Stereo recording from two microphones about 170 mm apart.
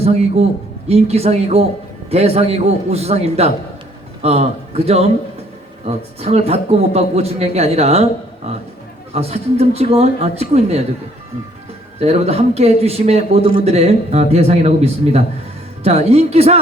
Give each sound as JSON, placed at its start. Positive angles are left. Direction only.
{"t": 0.9, "sound": "a man's voice", "side_deg": -35}
{"t": 6.1, "sound": "a man's voice", "side_deg": -35}
{"t": 9.1, "sound": "a man's voice", "side_deg": -35}
{"t": 11.9, "sound": "a man's voice", "side_deg": -35}